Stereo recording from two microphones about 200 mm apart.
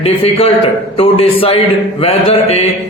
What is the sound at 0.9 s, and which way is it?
Speech, 30° left (ahead or behind).